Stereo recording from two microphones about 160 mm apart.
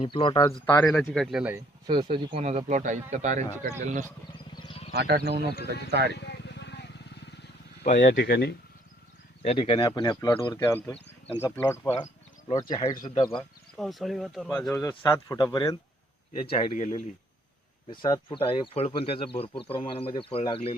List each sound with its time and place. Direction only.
0.0 s speech: 30° left (ahead or behind)
0.4 s speech: 15° left (ahead or behind); by 1.6 s 10° right (ahead or behind)
1.9 s speech: 30° right (ahead or behind)
2.4 s a man's voice: 45° right (ahead or behind)
4.5 s a sound: 30° left (ahead or behind)
4.9 s speech: 75° right (ahead or behind); by 6.1 s 90° right
6.1 s vehicle: 90° left
7.9 s speech: 90° left
9.4 s speech: 35° left (ahead or behind); by 11.9 s 15° left (ahead or behind)
12.5 s speech: 30° left (ahead or behind)
13.7 s speech: centre (ahead or behind)
14.5 s speech: 15° left (ahead or behind)
16.7 s speech: 50° left (ahead or behind)
18.0 s speech: 30° left (ahead or behind)